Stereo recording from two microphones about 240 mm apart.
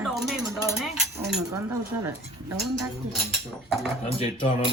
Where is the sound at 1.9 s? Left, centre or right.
Right.